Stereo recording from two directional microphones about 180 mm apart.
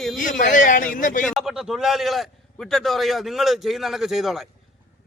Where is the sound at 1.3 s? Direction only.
Centre (ahead or behind).